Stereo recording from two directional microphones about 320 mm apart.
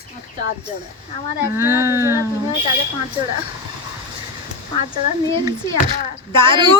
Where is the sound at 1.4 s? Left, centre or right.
Centre.